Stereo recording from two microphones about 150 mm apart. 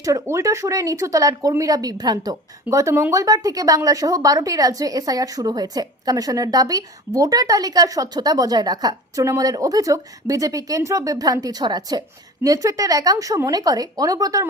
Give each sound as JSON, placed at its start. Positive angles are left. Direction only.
{"t": 0.0, "sound": "speech", "side_deg": -20}